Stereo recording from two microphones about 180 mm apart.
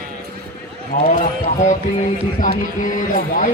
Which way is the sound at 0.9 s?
50° left (ahead or behind).